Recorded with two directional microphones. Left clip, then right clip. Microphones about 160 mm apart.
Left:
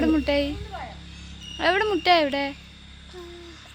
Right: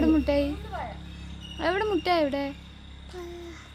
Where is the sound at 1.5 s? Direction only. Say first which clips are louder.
Left 4 dB; 20° left (ahead or behind).